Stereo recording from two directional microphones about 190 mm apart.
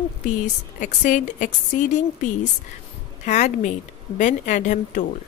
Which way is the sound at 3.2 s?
40° left (ahead or behind).